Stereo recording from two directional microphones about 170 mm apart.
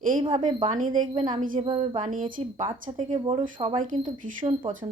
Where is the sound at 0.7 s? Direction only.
50° right (ahead or behind).